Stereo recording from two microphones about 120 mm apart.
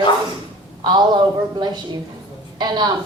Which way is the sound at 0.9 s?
35° right (ahead or behind).